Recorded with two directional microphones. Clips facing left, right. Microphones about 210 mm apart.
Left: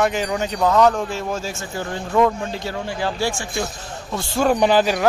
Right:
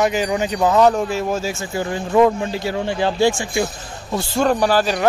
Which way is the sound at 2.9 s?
25° right (ahead or behind).